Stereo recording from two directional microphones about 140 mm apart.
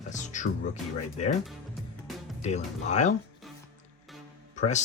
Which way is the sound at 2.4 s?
55° left (ahead or behind).